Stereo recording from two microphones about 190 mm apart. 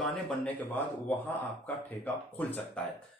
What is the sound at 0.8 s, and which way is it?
Speech, 10° left (ahead or behind).